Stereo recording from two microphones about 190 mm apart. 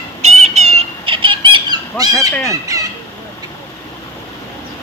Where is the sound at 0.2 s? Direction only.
35° right (ahead or behind).